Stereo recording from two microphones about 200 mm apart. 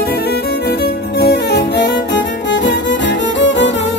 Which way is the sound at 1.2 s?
55° left (ahead or behind).